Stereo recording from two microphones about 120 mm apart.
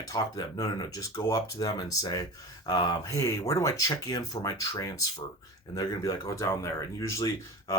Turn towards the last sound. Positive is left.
turn(degrees=25)  # may be behind; listen again after turning